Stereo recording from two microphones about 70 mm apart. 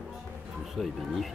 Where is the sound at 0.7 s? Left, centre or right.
Centre.